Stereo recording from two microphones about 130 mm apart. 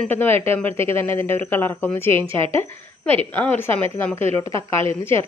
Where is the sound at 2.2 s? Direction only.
45° right (ahead or behind).